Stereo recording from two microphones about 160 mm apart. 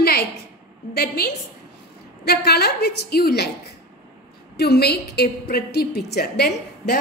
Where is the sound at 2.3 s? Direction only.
85° left.